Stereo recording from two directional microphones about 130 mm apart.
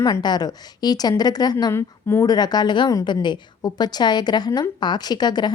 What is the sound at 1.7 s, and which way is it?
A woman's voice, 20° left (ahead or behind).